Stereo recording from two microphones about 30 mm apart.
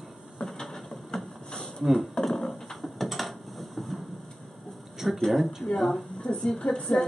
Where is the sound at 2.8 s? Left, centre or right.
Centre.